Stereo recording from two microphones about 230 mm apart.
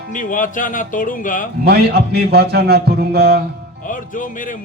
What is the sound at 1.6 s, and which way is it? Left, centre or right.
A man's voice, right.